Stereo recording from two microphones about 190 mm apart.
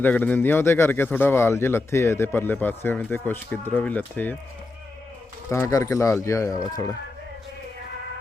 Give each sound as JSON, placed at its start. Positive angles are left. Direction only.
{"t": 0.0, "sound": "a man's voice", "side_deg": 10}
{"t": 5.5, "sound": "a man's voice", "side_deg": 15}